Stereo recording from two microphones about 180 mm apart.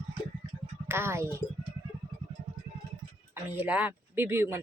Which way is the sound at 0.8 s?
15° right (ahead or behind).